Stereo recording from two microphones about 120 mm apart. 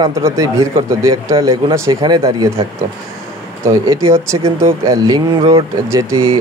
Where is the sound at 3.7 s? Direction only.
25° right (ahead or behind).